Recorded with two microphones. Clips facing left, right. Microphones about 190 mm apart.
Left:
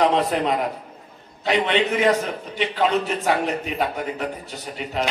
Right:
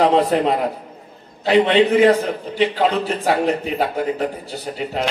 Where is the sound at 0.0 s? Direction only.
35° right (ahead or behind).